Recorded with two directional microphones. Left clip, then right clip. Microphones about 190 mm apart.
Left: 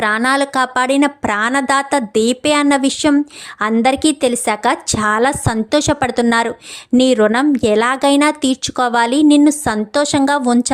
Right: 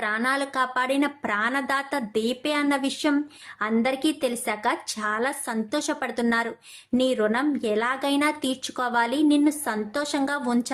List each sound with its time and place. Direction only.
0.0 s speech: 50° left (ahead or behind)